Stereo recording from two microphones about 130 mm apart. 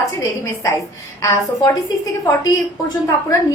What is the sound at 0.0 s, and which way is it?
A woman's voice, 25° left (ahead or behind).